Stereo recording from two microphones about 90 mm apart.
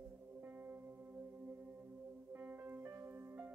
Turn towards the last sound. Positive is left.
turn(degrees=-20)  # may be behind; listen again after turning